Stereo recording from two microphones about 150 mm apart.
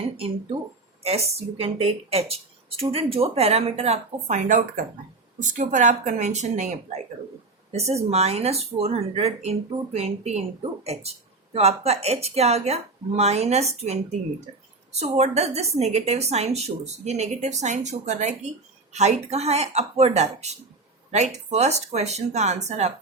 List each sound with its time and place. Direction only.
1.0 s speech: 45° right (ahead or behind)